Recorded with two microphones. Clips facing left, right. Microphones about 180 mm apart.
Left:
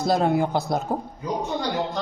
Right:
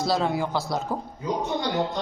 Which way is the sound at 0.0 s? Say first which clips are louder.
Left 4 dB; 55° left (ahead or behind).